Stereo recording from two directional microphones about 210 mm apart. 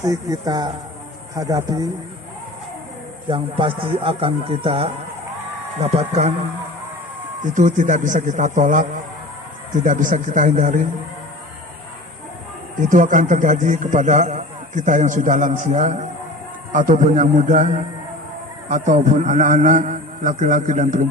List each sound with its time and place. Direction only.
0.0 s speech: 15° right (ahead or behind)
3.2 s a man's voice: 25° right (ahead or behind)
7.4 s a man's voice: 35° right (ahead or behind)
12.9 s a man's voice: 40° right (ahead or behind)